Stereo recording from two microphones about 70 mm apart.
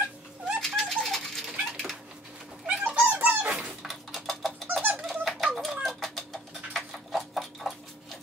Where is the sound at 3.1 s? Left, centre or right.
Right.